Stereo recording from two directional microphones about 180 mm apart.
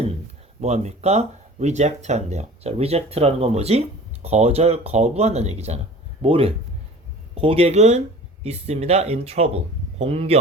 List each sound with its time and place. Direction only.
0.6 s speech: 40° right (ahead or behind)